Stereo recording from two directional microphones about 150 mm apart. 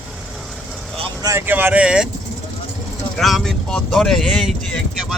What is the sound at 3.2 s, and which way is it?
Speech, centre (ahead or behind).